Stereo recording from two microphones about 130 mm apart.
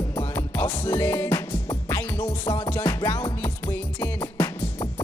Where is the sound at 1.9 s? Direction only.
10° left (ahead or behind).